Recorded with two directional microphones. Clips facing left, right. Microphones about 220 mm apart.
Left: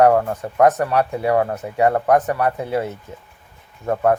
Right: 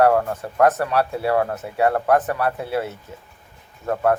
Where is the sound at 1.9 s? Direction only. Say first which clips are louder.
Left 2 dB; 15° left (ahead or behind).